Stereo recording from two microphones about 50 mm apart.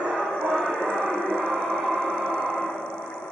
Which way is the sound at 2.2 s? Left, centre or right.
Centre.